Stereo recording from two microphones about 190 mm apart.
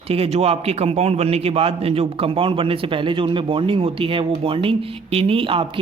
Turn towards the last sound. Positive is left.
turn(degrees=-30)  # may be behind; listen again after turning